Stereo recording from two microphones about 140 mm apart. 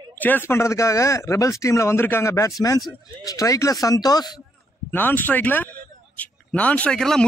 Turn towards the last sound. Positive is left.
turn(degrees=5)  # may be behind; listen again after turning